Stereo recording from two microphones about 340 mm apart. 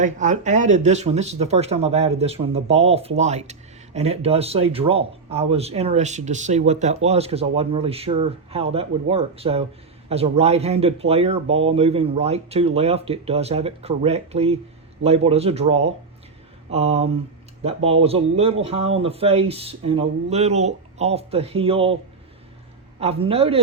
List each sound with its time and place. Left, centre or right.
0.0 s speech: right
23.0 s speech: centre